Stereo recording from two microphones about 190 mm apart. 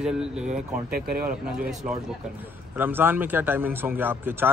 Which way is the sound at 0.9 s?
50° right (ahead or behind).